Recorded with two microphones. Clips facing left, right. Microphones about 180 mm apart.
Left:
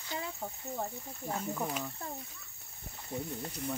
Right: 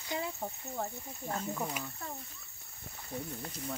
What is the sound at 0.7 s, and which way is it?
Cricket, 5° left (ahead or behind).